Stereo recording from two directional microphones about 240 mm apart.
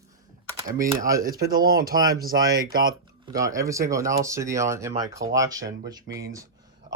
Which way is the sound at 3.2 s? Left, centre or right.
Centre.